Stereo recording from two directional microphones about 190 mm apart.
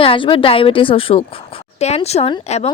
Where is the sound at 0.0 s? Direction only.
25° left (ahead or behind).